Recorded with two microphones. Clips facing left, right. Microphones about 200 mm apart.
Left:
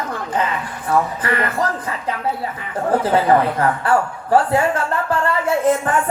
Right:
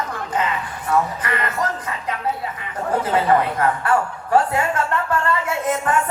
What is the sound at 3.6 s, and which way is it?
Speech, 30° left (ahead or behind).